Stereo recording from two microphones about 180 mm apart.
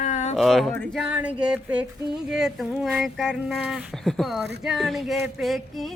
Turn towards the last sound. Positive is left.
turn(degrees=0)  # may be behind; listen again after turning